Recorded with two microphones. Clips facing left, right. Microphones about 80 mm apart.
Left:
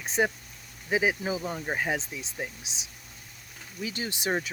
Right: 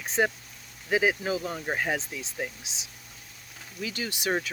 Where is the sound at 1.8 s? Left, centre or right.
Centre.